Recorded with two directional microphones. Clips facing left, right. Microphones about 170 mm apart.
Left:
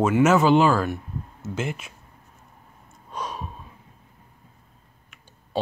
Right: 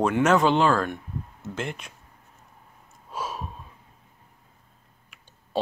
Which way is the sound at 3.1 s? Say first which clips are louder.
Even; 5° right (ahead or behind).